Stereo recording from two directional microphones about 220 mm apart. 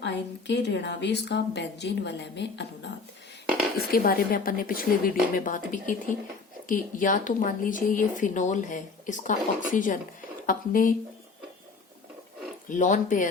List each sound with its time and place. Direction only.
0.0 s a woman's voice: 50° left (ahead or behind)
3.9 s speech: 40° left (ahead or behind)
12.6 s speech: 35° left (ahead or behind)